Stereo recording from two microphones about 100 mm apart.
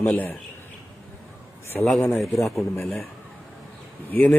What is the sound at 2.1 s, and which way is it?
Speech, centre (ahead or behind).